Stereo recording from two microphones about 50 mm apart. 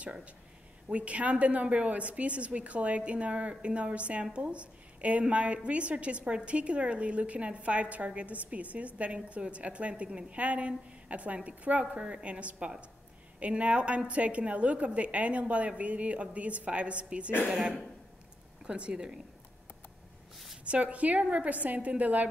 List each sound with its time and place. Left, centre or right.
0.8 s a woman's voice: right
20.6 s a woman's voice: right